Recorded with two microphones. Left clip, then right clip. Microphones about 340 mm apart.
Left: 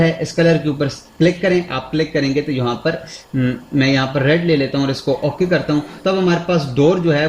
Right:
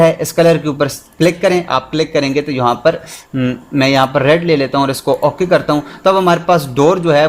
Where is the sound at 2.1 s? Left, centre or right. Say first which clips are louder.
Right 4 dB; centre.